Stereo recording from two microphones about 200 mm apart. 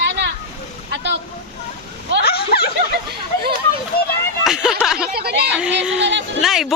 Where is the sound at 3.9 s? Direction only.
50° left (ahead or behind).